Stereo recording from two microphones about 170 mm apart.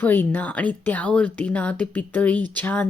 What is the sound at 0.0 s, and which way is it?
Speech, 10° left (ahead or behind).